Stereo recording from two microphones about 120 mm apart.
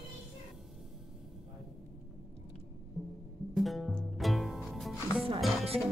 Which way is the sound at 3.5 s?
Centre (ahead or behind).